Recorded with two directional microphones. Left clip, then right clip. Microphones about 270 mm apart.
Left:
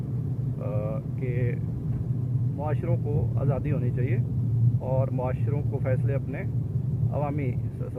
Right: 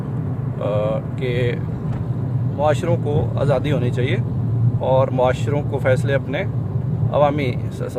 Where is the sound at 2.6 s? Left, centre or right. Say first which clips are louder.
Right 14 dB; right.